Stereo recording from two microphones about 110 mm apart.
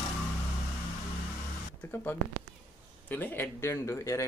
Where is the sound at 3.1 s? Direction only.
20° left (ahead or behind).